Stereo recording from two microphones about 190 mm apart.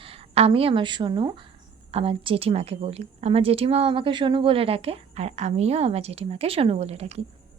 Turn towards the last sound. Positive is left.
turn(degrees=-35)  # may be behind; listen again after turning